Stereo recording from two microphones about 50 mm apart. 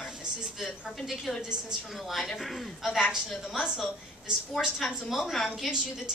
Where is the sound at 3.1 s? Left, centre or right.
Centre.